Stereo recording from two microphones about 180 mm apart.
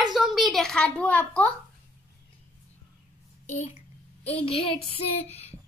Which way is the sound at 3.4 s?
45° left (ahead or behind).